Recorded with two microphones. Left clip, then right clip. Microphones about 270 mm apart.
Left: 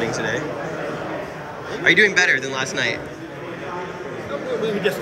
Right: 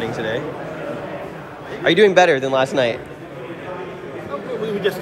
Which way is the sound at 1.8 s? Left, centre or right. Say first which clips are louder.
Right 2 dB; centre.